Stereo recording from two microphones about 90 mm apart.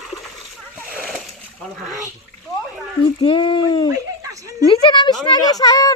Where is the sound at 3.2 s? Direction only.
65° left (ahead or behind); by 3.8 s 50° left (ahead or behind).